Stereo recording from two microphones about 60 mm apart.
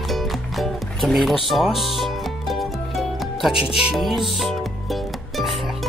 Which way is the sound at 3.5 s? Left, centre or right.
Centre.